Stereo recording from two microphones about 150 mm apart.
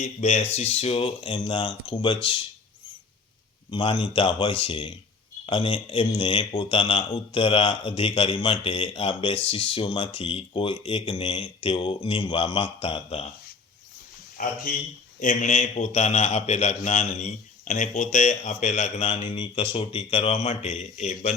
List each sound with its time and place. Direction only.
0.0 s a man's voice: 45° left (ahead or behind)
3.7 s speech: 30° left (ahead or behind)
14.4 s speech: 70° left (ahead or behind)
15.2 s a man's voice: 55° left (ahead or behind)